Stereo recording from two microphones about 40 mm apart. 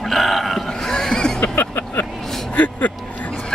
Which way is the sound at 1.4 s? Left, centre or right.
Left.